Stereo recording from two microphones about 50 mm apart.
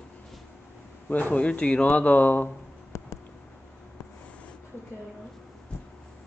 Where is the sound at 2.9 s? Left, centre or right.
Left.